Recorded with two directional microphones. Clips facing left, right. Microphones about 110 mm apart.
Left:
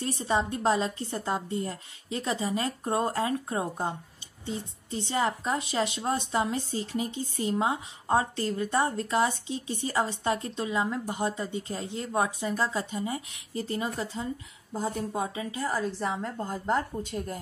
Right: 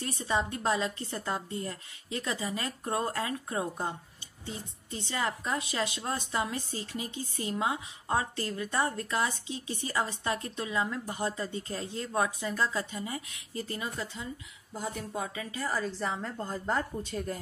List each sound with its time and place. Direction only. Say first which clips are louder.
0.0 s a woman's voice: left 3 dB; 25° left (ahead or behind)
15.8 s a woman's voice: left 3 dB; 10° left (ahead or behind)